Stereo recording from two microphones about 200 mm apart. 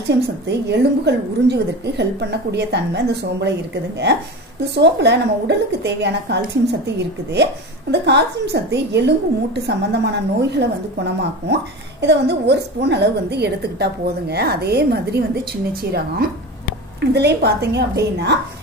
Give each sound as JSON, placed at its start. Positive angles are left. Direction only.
{"t": 0.1, "sound": "a woman's voice", "side_deg": -60}
{"t": 4.7, "sound": "a woman's voice", "side_deg": -60}
{"t": 7.9, "sound": "a woman's voice", "side_deg": -60}